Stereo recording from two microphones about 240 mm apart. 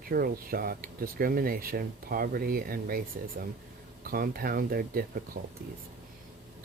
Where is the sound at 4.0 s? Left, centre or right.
Right.